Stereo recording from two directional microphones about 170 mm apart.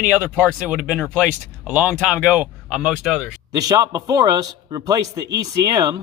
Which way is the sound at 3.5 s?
20° right (ahead or behind).